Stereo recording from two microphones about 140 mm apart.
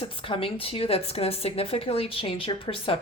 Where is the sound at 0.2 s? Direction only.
40° left (ahead or behind).